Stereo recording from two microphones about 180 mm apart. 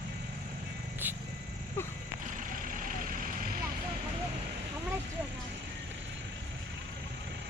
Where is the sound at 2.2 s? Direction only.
45° right (ahead or behind).